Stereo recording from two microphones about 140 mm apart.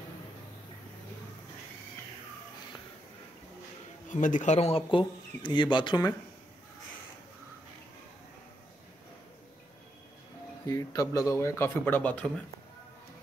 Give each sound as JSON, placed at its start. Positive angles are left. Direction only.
{"t": 4.1, "sound": "speech", "side_deg": 65}
{"t": 10.7, "sound": "speech", "side_deg": 25}